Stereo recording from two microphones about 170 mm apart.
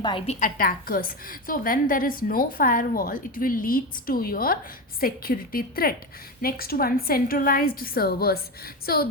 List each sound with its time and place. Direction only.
0.0 s a woman's voice: 30° left (ahead or behind)
0.3 s a woman's voice: 50° left (ahead or behind)